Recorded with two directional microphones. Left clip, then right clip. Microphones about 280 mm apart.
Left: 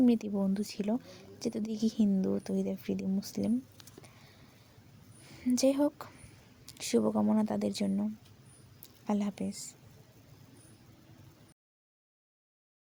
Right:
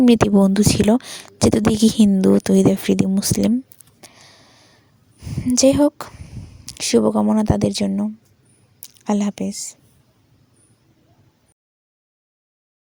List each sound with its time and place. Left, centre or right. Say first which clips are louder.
0.0 s speech: right 15 dB; right
4.0 s a sound: right 12 dB; right
5.2 s speech: right 13 dB; right